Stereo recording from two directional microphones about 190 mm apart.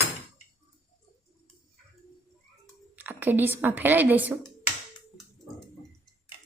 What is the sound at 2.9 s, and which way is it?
Speech, 10° right (ahead or behind).